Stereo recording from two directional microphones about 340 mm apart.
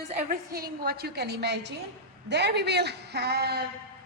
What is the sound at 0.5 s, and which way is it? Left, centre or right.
A woman's voice, right.